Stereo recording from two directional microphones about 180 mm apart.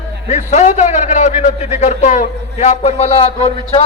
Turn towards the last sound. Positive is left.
turn(degrees=30)  # may be behind; listen again after turning